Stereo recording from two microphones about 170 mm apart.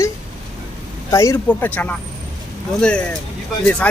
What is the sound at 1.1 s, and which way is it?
A man's voice, 15° left (ahead or behind).